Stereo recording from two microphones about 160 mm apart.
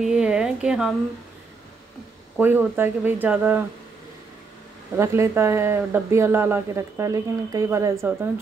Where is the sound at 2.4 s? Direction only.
10° right (ahead or behind).